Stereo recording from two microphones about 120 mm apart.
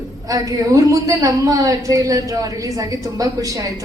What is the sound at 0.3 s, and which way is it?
A woman's voice, 30° right (ahead or behind).